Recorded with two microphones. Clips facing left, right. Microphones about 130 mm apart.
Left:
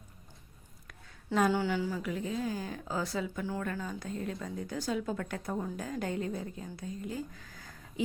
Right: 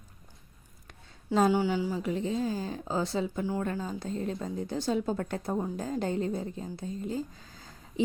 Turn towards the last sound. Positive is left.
turn(degrees=-25)  # may be behind; listen again after turning